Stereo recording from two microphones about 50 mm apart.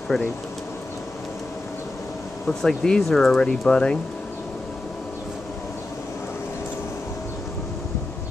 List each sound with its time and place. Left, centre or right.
0.1 s speech: centre
2.4 s speech: centre